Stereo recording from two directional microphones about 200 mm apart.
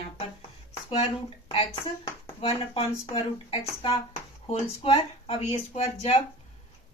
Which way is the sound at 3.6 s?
25° left (ahead or behind).